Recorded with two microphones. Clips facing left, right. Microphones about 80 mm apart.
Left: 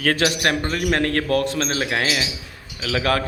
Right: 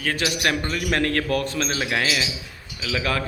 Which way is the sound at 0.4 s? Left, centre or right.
Left.